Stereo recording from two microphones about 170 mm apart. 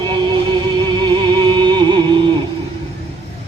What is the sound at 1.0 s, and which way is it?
Music, 25° right (ahead or behind).